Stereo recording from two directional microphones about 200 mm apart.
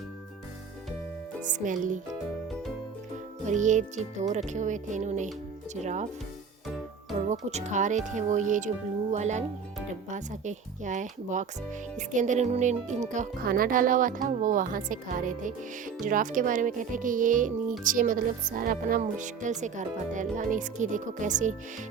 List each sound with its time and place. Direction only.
1.4 s speech: 40° right (ahead or behind)
3.4 s speech: 35° right (ahead or behind)
7.3 s speech: 35° right (ahead or behind)